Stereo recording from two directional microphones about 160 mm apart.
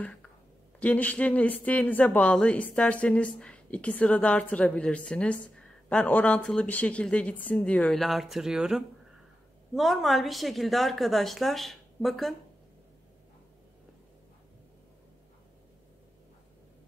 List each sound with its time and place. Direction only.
0.0 s a woman's voice: 5° left (ahead or behind)